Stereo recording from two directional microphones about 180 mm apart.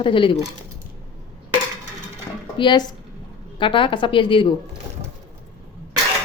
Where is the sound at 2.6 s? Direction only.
25° left (ahead or behind).